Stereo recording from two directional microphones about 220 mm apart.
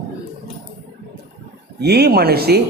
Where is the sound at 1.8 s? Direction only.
45° right (ahead or behind).